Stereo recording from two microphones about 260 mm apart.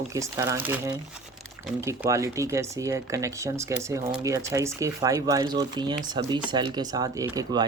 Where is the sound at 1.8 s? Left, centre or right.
Centre.